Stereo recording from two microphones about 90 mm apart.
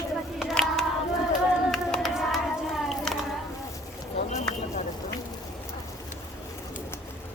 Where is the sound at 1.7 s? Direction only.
Centre (ahead or behind).